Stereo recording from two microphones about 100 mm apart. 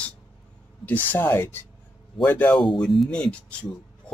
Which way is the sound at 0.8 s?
20° left (ahead or behind).